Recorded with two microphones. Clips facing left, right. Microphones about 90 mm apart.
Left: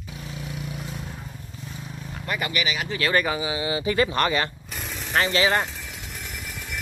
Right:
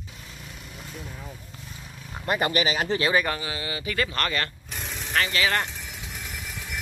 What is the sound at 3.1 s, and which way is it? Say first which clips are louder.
Speech: left 1 dB; 5° left (ahead or behind).